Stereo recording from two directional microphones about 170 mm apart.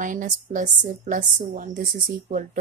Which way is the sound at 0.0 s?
50° right (ahead or behind).